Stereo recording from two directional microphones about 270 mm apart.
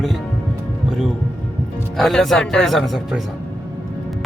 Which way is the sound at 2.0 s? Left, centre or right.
Centre.